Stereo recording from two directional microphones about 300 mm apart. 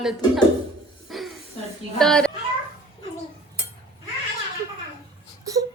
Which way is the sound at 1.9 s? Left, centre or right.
Centre.